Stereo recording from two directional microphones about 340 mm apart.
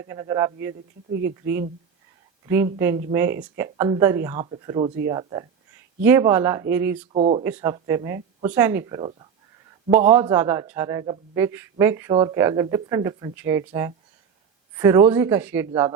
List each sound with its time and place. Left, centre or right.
0.0 s a man's voice: centre
2.5 s a man's voice: centre
7.1 s a man's voice: centre
14.8 s a man's voice: centre